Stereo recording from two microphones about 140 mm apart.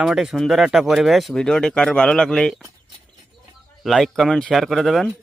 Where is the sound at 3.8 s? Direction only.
Centre (ahead or behind).